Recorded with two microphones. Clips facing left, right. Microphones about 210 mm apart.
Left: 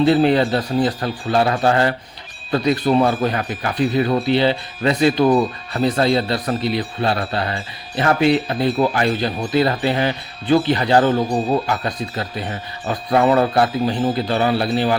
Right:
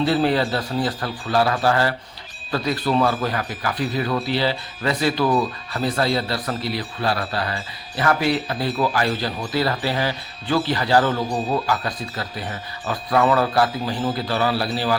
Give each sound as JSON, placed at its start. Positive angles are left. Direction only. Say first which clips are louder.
{"t": 0.0, "sound": "speech", "louder": "left 5 dB", "side_deg": 20}